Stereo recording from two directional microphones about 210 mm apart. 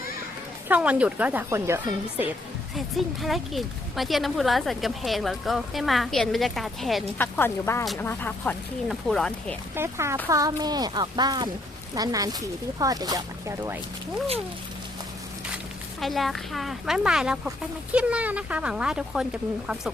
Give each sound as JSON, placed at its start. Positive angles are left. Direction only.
{"t": 0.7, "sound": "speech", "side_deg": -5}
{"t": 2.7, "sound": "speech", "side_deg": 0}
{"t": 7.3, "sound": "speech", "side_deg": 10}
{"t": 9.7, "sound": "speech", "side_deg": -10}
{"t": 16.0, "sound": "speech", "side_deg": 0}